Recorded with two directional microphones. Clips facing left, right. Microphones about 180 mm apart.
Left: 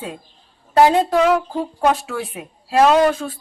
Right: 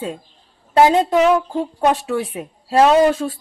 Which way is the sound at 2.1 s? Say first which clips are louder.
Right 5 dB; 30° right (ahead or behind).